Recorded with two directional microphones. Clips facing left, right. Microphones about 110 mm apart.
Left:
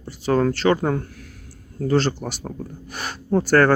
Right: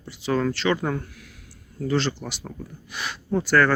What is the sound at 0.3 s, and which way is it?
Speech, 40° left (ahead or behind).